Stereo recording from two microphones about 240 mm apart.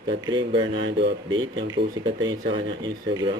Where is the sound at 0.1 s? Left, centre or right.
Centre.